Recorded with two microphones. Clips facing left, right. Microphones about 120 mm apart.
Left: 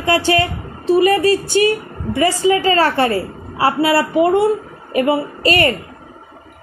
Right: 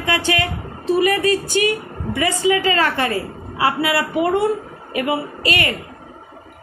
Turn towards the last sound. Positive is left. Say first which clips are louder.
# left 6 dB
turn(degrees=35)  # may be behind; listen again after turning